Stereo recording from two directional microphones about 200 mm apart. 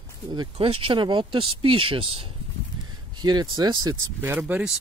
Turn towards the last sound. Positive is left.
turn(degrees=-5)  # may be behind; listen again after turning